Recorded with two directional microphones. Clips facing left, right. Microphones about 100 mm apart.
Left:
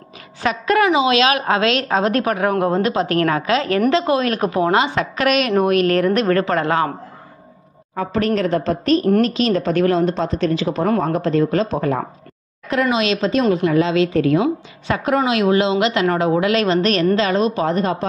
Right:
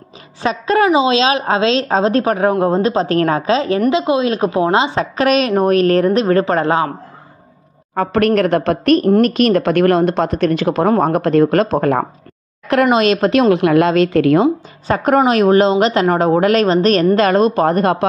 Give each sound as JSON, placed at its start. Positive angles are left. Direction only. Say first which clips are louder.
{"t": 0.4, "sound": "a woman's voice", "louder": "right 2 dB", "side_deg": -25}
{"t": 7.9, "sound": "speech", "louder": "right 5 dB", "side_deg": -60}
{"t": 12.9, "sound": "a woman's voice", "louder": "right 5 dB", "side_deg": -50}
{"t": 13.3, "sound": "a woman's voice", "louder": "right 5 dB", "side_deg": -75}
{"t": 14.9, "sound": "a woman's voice", "louder": "right 5 dB", "side_deg": -45}